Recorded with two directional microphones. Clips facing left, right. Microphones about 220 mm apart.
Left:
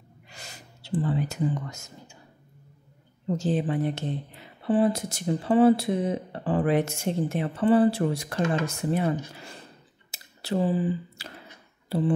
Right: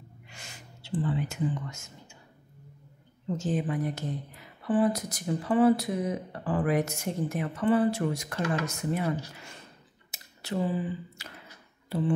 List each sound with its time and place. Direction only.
0.3 s gasp: 35° left (ahead or behind)
3.3 s speech: 35° left (ahead or behind)
10.1 s a sound: 35° left (ahead or behind)